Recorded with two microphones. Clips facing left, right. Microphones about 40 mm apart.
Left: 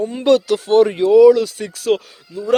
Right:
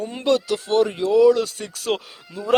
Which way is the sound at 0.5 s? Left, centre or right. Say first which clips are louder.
Left 6 dB; left.